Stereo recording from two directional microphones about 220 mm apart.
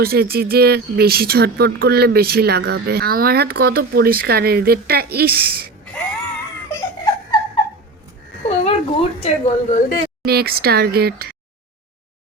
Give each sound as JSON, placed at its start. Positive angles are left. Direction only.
{"t": 0.0, "sound": "speech", "side_deg": -45}
{"t": 6.7, "sound": "crying", "side_deg": 15}
{"t": 8.4, "sound": "speech", "side_deg": 25}
{"t": 10.2, "sound": "speech", "side_deg": -45}